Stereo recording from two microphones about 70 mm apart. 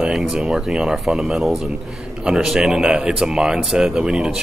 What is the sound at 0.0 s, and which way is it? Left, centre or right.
Speech, centre.